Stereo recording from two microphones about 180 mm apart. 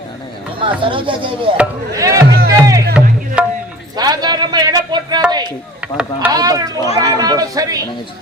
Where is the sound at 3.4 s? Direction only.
5° right (ahead or behind).